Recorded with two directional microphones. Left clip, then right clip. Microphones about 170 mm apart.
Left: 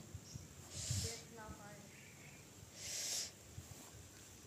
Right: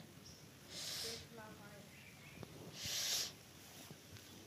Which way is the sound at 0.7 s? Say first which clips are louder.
Right 1 dB; 15° right (ahead or behind).